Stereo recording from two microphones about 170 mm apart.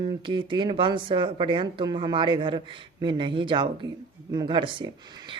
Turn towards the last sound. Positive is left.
turn(degrees=-30)  # may be behind; listen again after turning